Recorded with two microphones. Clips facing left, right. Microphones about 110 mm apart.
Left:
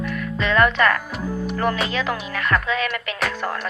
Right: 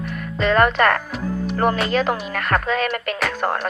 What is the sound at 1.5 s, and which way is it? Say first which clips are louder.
Speech: right 3 dB; 40° right (ahead or behind).